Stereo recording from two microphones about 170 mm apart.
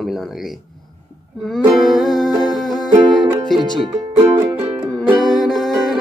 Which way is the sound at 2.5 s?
Centre (ahead or behind).